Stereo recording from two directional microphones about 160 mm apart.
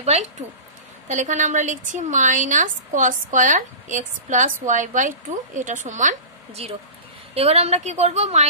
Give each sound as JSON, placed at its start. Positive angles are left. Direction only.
{"t": 1.0, "sound": "a woman's voice", "side_deg": -50}